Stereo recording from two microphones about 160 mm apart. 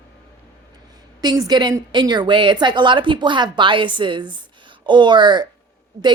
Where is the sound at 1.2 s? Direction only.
25° right (ahead or behind).